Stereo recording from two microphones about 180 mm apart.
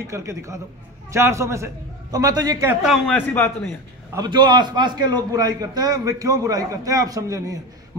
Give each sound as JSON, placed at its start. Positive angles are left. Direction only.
{"t": 0.0, "sound": "a man's voice", "side_deg": -15}
{"t": 2.8, "sound": "a man's voice", "side_deg": 0}
{"t": 4.1, "sound": "a man's voice", "side_deg": -25}